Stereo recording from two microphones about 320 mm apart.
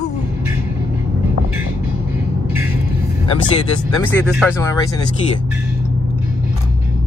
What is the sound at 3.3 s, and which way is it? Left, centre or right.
Speech, centre.